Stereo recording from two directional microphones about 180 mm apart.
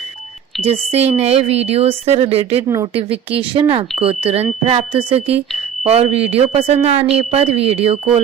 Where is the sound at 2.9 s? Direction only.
30° right (ahead or behind).